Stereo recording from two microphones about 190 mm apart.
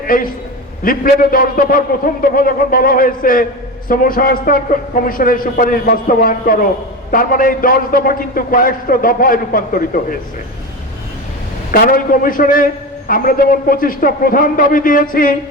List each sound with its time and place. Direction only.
0.0 s a man's voice: 50° left (ahead or behind)
11.7 s a man's voice: 45° left (ahead or behind)